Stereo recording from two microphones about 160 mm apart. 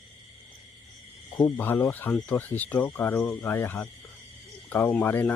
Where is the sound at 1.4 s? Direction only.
15° left (ahead or behind).